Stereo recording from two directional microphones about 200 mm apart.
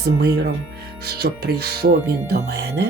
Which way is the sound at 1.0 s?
50° right (ahead or behind).